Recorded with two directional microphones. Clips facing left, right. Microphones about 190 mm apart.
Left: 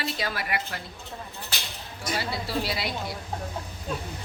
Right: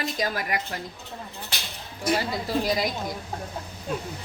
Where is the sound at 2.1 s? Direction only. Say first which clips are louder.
Right 1 dB; 40° right (ahead or behind).